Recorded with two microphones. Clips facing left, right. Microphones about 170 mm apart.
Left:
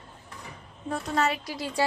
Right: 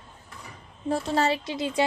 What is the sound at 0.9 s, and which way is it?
Speech, 30° right (ahead or behind).